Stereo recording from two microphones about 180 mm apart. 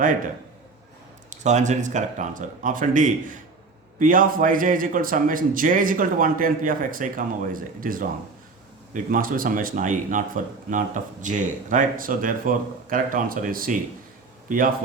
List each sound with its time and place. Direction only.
1.3 s speech: 40° right (ahead or behind)